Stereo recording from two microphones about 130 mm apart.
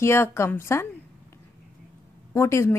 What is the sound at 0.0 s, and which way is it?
Speech, 20° left (ahead or behind).